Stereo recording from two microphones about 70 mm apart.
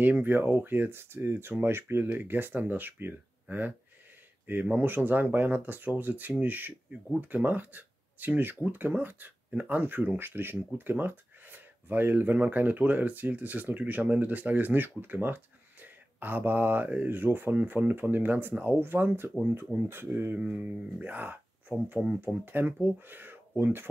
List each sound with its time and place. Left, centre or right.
0.0 s speech: right